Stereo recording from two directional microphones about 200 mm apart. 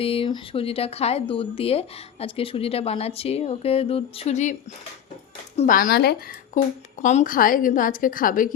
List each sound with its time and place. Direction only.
0.0 s speech: 25° left (ahead or behind)
5.5 s a woman's voice: 40° left (ahead or behind)
7.0 s a woman's voice: 35° left (ahead or behind)